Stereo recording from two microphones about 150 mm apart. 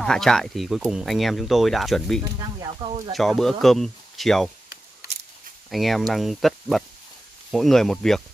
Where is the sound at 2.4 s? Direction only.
25° right (ahead or behind).